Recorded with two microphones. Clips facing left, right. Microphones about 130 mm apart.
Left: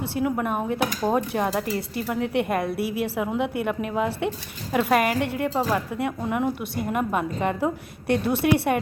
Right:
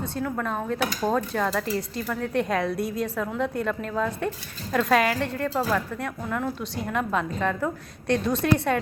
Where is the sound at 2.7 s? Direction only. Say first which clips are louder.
Left 1 dB; 70° left (ahead or behind).